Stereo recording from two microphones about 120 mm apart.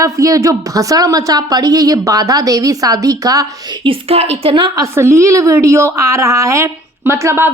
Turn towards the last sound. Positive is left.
turn(degrees=-20)  # may be behind; listen again after turning